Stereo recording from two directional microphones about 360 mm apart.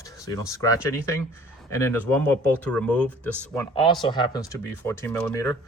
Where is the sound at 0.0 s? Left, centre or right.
Centre.